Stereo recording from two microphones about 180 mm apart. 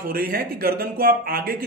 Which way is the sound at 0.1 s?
55° right (ahead or behind).